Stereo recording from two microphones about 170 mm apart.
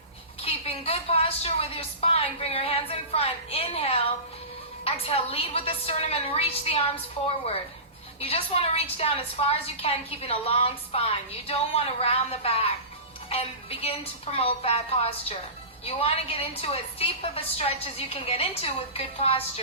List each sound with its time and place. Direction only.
0.4 s a woman's voice: 35° left (ahead or behind)
5.0 s a woman's voice: 35° left (ahead or behind)
8.2 s a woman's voice: 35° left (ahead or behind)